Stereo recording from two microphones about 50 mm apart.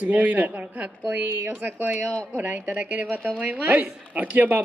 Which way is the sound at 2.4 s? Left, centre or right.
Right.